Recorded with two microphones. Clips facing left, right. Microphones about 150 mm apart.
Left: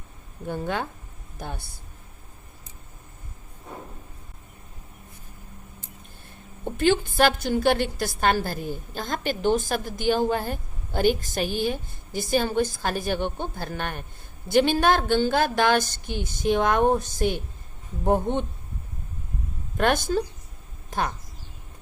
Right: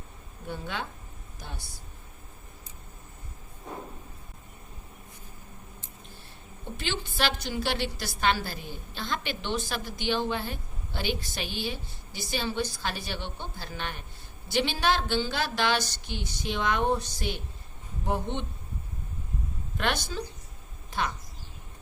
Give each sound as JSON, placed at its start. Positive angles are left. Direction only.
{"t": 0.4, "sound": "a woman's voice", "side_deg": 45}
{"t": 6.7, "sound": "a woman's voice", "side_deg": 50}
{"t": 19.7, "sound": "a woman's voice", "side_deg": 50}